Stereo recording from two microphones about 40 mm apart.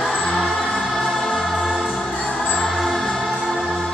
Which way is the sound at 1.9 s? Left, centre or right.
Left.